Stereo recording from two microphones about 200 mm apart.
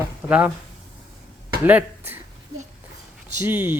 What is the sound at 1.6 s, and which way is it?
Speech, 10° right (ahead or behind).